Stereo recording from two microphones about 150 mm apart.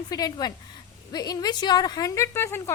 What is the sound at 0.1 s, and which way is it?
A woman's voice, 25° left (ahead or behind).